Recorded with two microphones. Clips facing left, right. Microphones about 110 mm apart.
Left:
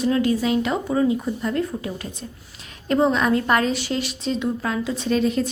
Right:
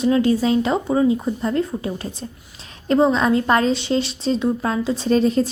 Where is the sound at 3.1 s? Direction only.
25° right (ahead or behind).